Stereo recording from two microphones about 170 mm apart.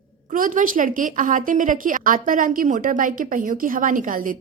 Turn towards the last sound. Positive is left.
turn(degrees=-55)  # may be behind; listen again after turning